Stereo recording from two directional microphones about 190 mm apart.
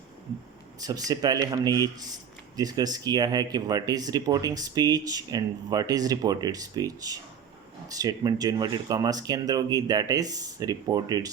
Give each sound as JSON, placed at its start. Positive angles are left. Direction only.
{"t": 0.8, "sound": "speech", "side_deg": -20}